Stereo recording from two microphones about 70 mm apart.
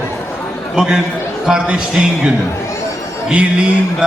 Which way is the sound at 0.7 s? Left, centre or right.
Centre.